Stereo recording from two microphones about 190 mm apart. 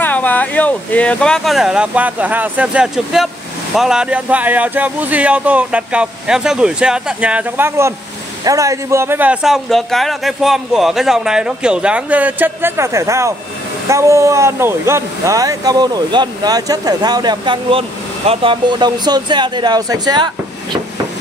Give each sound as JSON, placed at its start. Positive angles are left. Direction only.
{"t": 0.0, "sound": "speech", "side_deg": 10}